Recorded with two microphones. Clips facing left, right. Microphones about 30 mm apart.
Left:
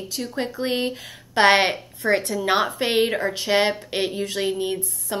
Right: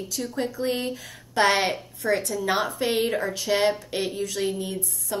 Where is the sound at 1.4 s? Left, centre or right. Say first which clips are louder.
Left 5 dB; left.